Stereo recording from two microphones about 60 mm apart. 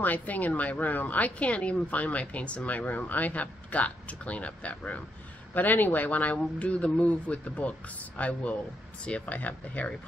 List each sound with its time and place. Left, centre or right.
0.0 s speech: left